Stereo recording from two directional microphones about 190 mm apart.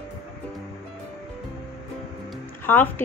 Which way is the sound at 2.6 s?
10° left (ahead or behind).